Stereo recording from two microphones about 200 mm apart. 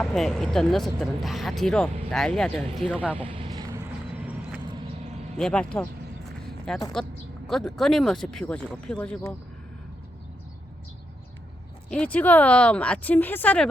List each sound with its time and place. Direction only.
0.0 s speech: centre (ahead or behind)
2.9 s speech: 5° right (ahead or behind)
3.2 s vehicle: 25° right (ahead or behind)
5.4 s speech: 5° left (ahead or behind)
11.9 s speech: 5° left (ahead or behind)